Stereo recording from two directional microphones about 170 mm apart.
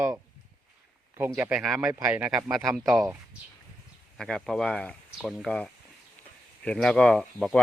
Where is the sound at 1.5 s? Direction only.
Centre (ahead or behind).